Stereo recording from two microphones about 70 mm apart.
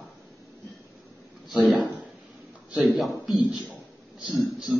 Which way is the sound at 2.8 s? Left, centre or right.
Centre.